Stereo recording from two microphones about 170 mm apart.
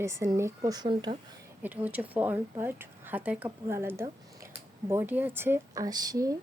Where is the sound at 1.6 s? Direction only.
10° right (ahead or behind).